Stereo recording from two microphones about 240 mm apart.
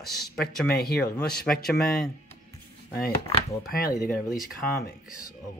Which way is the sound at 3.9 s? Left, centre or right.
Left.